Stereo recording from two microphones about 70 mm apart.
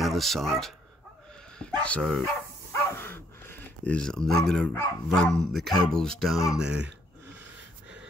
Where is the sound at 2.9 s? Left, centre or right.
Left.